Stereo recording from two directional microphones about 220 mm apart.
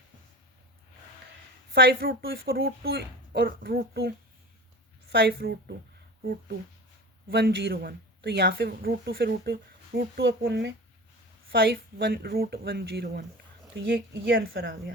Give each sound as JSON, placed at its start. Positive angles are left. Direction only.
{"t": 1.7, "sound": "speech", "side_deg": -45}
{"t": 5.1, "sound": "speech", "side_deg": -45}
{"t": 7.3, "sound": "speech", "side_deg": -45}